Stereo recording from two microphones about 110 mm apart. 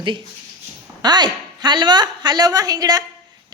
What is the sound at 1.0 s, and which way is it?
A woman's voice, 40° right (ahead or behind).